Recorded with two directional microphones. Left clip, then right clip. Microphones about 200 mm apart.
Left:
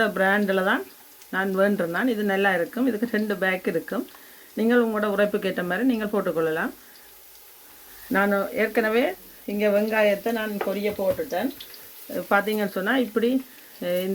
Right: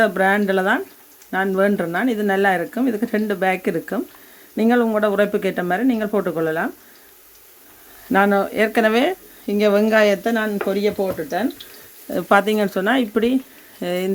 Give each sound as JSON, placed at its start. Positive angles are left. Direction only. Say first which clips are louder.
{"t": 0.0, "sound": "speech", "louder": "right 5 dB", "side_deg": -30}
{"t": 8.1, "sound": "speech", "louder": "right 6 dB", "side_deg": -35}
{"t": 9.5, "sound": "speech", "louder": "right 6 dB", "side_deg": -50}
{"t": 12.1, "sound": "speech", "louder": "right 6 dB", "side_deg": -40}